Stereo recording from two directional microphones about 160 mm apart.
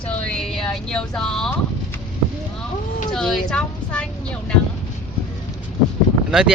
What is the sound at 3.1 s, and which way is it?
A woman's voice, 5° left (ahead or behind).